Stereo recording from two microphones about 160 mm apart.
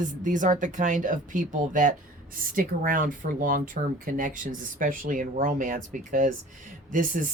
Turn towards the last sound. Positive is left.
turn(degrees=-55)  # may be behind; listen again after turning